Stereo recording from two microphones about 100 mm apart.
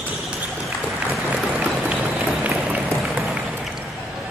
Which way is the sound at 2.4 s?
15° right (ahead or behind).